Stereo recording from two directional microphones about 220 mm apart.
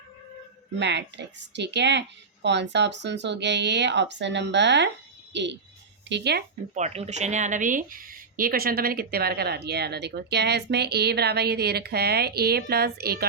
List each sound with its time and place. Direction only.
0.8 s a woman's voice: 50° right (ahead or behind)
6.7 s a woman's voice: 30° right (ahead or behind); by 13.2 s 45° right (ahead or behind)